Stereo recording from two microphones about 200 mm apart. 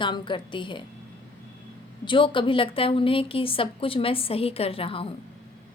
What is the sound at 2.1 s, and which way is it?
A woman's voice, 25° left (ahead or behind).